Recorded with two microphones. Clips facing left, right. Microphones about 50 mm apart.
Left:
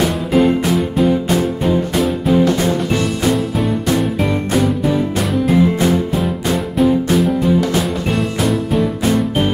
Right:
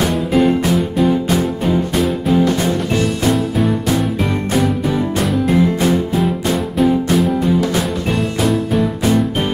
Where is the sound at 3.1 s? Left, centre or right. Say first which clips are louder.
Even; centre.